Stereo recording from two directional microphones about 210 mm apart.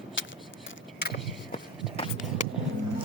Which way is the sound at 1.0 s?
50° left (ahead or behind).